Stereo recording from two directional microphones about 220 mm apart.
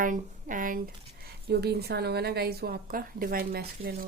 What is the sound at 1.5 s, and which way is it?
A woman's voice, 45° right (ahead or behind).